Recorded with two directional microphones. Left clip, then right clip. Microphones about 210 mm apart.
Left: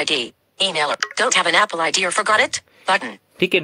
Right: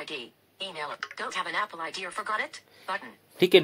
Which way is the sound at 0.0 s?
50° left (ahead or behind).